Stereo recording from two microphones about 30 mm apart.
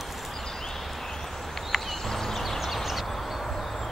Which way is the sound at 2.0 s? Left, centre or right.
Centre.